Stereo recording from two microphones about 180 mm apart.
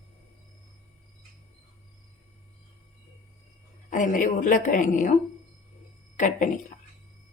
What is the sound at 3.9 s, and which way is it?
A woman's voice, 45° left (ahead or behind).